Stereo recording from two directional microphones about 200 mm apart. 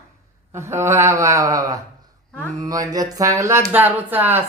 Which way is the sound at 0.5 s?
15° right (ahead or behind).